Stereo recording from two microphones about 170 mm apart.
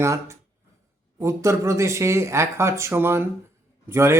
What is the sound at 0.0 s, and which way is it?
Speech, 15° right (ahead or behind).